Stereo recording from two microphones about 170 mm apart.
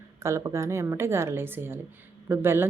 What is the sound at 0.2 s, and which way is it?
Speech, 15° right (ahead or behind).